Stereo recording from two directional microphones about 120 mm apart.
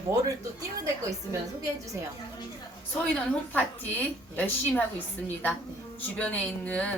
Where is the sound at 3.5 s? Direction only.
15° left (ahead or behind).